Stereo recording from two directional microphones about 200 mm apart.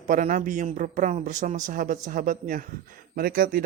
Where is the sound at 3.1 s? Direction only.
45° right (ahead or behind).